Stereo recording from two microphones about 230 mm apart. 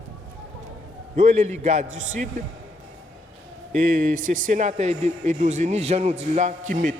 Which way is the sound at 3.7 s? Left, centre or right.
Right.